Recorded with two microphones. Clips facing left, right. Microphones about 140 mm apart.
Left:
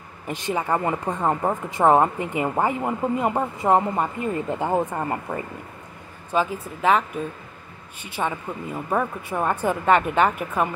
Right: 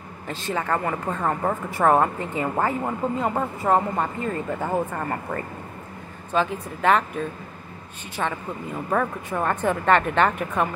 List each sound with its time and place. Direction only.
0.3 s a woman's voice: 15° left (ahead or behind)